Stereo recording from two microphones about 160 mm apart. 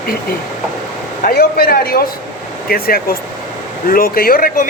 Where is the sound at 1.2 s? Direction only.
65° left (ahead or behind).